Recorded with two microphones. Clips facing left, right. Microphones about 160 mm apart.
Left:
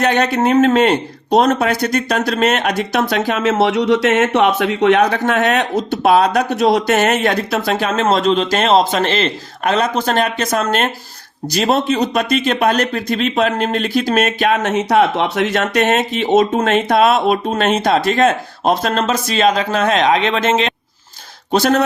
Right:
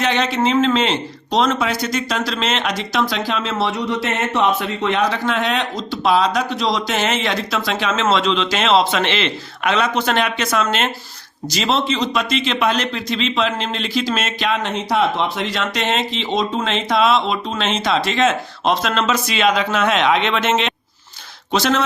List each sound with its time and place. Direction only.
0.0 s speech: 50° left (ahead or behind)
3.6 s speech: 75° left (ahead or behind); by 14.7 s 50° left (ahead or behind)
14.7 s speech: 70° left (ahead or behind)
16.6 s speech: 50° left (ahead or behind)
19.4 s a man's voice: 40° left (ahead or behind)
21.5 s speech: 50° left (ahead or behind)